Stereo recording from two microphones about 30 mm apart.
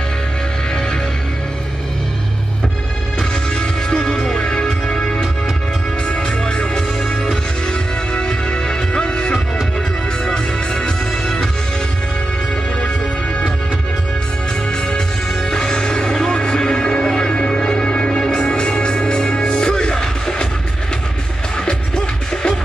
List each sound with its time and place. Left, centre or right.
3.2 s music: left
14.7 s music: left
21.6 s music: left